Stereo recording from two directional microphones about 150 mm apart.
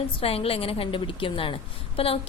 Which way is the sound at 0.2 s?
40° left (ahead or behind).